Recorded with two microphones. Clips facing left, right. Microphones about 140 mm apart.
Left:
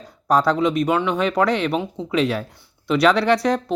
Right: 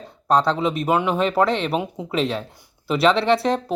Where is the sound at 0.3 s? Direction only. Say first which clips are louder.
Left 1 dB; 5° left (ahead or behind).